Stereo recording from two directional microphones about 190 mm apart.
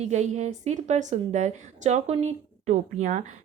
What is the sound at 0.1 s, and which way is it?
A woman's voice, 35° right (ahead or behind).